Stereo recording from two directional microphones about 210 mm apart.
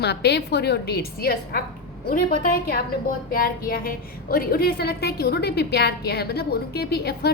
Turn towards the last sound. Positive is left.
turn(degrees=50)  # may be behind; listen again after turning